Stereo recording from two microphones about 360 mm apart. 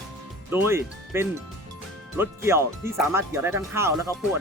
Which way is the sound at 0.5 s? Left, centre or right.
Centre.